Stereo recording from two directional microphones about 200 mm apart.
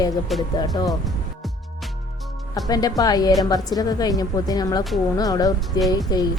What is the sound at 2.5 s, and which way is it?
A woman's voice, 20° left (ahead or behind).